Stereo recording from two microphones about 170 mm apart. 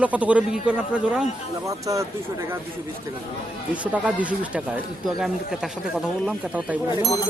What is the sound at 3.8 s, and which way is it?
A man's voice, 10° right (ahead or behind).